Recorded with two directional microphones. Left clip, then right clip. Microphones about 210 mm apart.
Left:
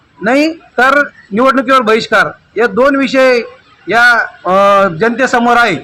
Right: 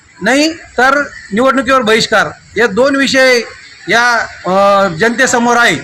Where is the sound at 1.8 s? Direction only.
Centre (ahead or behind).